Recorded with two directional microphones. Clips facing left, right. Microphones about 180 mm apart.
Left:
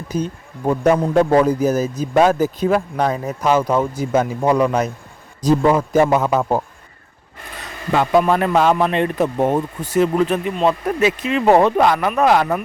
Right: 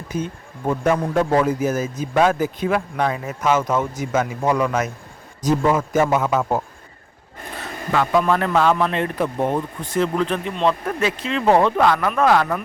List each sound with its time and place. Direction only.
0.1 s a man's voice: 35° left (ahead or behind)
8.2 s a man's voice: 15° left (ahead or behind)